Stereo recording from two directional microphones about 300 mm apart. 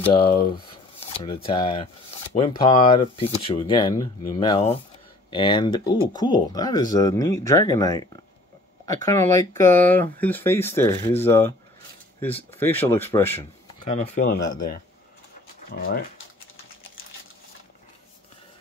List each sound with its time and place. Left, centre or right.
0.1 s speech: centre
13.9 s speech: left